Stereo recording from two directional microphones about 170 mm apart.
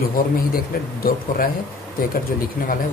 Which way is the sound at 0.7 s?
60° left (ahead or behind).